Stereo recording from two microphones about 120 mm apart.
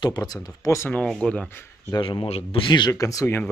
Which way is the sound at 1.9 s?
45° left (ahead or behind).